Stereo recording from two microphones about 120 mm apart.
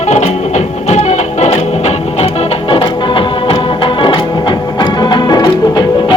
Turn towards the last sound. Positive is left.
turn(degrees=35)  # may be behind; listen again after turning